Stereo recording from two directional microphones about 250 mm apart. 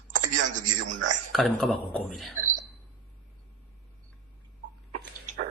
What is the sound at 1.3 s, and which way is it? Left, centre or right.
A man's voice, centre.